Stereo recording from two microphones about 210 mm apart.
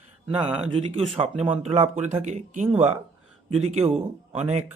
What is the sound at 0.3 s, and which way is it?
Speech, 25° right (ahead or behind).